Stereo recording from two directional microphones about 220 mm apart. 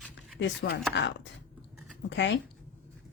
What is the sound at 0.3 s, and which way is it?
Speech, 50° left (ahead or behind).